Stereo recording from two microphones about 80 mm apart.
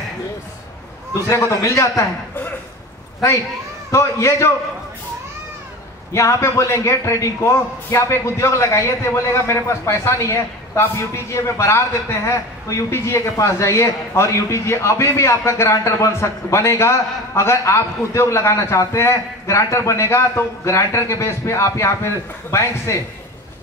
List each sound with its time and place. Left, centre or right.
1.3 s a man's voice: left
3.9 s a man's voice: left
6.1 s a man's voice: left